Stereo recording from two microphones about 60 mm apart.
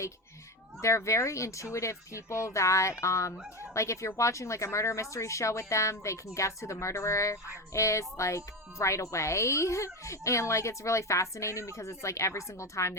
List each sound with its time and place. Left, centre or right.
0.8 s speech: left